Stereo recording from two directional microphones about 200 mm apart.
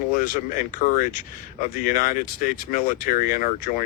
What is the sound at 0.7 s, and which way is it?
Speech, 40° left (ahead or behind).